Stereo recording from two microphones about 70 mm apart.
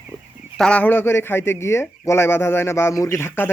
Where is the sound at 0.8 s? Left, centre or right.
Left.